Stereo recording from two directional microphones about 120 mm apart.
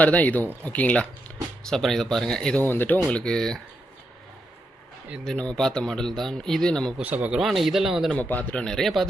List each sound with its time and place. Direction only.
0.0 s a man's voice: 10° left (ahead or behind)
5.2 s a man's voice: 5° left (ahead or behind)
7.0 s a man's voice: 15° right (ahead or behind)
8.1 s speech: 10° left (ahead or behind)